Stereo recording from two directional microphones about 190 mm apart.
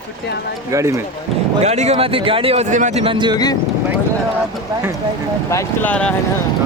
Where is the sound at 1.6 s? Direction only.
35° right (ahead or behind).